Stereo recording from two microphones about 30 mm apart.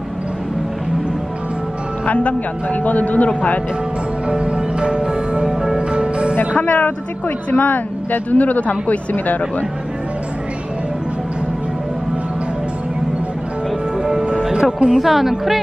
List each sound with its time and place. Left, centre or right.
2.0 s a man's voice: left
4.3 s music: right
6.6 s speech: left
9.1 s speech: left
14.5 s speech: right
15.0 s speech: centre